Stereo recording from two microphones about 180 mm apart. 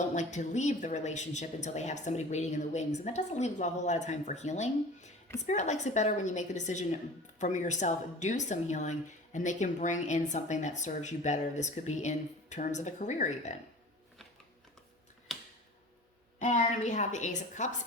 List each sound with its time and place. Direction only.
0.1 s a woman's voice: 40° left (ahead or behind)
15.3 s a sound: centre (ahead or behind)
16.4 s a woman's voice: 40° left (ahead or behind)